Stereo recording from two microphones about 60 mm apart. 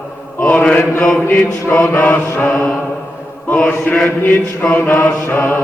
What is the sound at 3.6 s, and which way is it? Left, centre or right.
Mantra, left.